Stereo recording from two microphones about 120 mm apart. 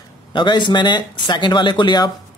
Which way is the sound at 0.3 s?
40° left (ahead or behind).